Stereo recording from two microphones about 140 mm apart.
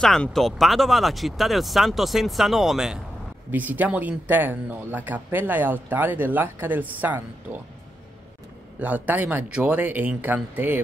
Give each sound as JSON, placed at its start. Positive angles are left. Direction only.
{"t": 0.0, "sound": "speech", "side_deg": 5}
{"t": 8.7, "sound": "speech", "side_deg": -10}